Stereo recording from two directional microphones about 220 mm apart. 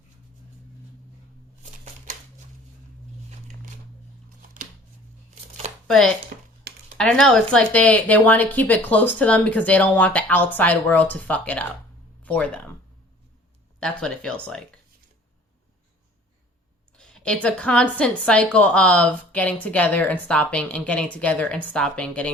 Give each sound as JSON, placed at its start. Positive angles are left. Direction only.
{"t": 6.3, "sound": "a sound", "side_deg": -35}
{"t": 6.9, "sound": "speech", "side_deg": 0}
{"t": 13.7, "sound": "a woman's voice", "side_deg": 5}
{"t": 17.0, "sound": "a woman's voice", "side_deg": 5}